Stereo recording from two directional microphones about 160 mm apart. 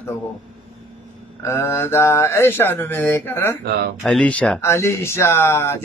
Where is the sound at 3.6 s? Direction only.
85° right.